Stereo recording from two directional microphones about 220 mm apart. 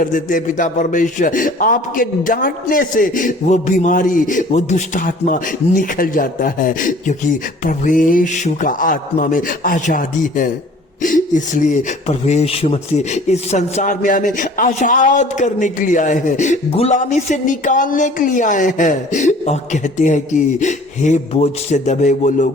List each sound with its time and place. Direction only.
0.0 s speech: 35° left (ahead or behind)